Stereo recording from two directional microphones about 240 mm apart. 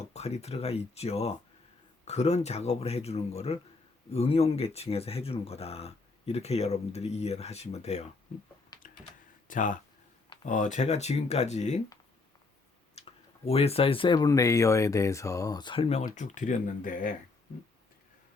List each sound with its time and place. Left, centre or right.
0.0 s speech: left
9.5 s speech: left
13.0 s speech: left